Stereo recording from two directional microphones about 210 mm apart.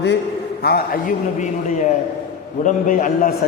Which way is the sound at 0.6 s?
45° left (ahead or behind).